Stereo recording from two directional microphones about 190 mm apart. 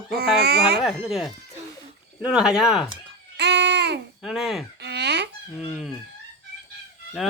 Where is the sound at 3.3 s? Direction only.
60° right (ahead or behind).